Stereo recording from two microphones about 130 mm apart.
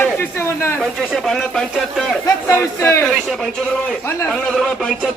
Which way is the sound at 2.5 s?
15° left (ahead or behind).